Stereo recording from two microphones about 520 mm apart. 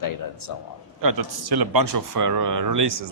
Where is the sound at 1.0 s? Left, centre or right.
Right.